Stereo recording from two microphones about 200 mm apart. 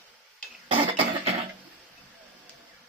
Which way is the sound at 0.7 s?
25° right (ahead or behind).